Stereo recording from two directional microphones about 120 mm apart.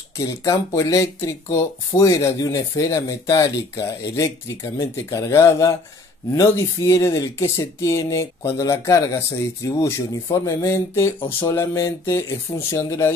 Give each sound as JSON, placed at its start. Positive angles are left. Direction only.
{"t": 0.2, "sound": "speech", "side_deg": 25}